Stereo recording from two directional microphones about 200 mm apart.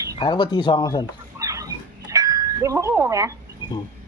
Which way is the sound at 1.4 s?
15° right (ahead or behind).